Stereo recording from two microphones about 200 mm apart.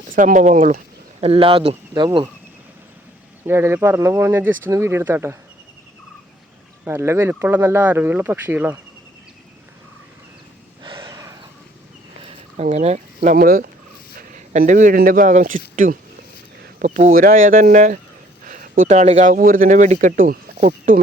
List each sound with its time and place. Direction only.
0.2 s speech: 40° right (ahead or behind); by 2.3 s 25° right (ahead or behind)
3.4 s speech: 10° right (ahead or behind)
6.8 s speech: 10° right (ahead or behind)
10.8 s a sound: 20° right (ahead or behind)
12.2 s speech: 35° right (ahead or behind)
18.4 s a sound: 40° right (ahead or behind)
18.9 s speech: 35° right (ahead or behind)